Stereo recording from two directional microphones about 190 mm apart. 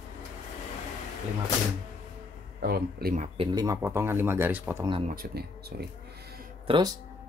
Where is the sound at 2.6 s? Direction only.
55° right (ahead or behind).